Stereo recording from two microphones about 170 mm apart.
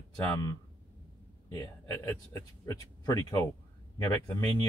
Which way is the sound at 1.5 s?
15° left (ahead or behind).